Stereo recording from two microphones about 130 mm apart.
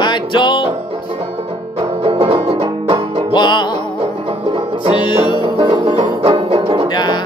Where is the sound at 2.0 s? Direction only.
45° right (ahead or behind).